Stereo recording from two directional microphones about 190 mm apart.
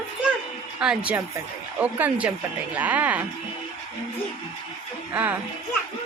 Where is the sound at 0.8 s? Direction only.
5° right (ahead or behind).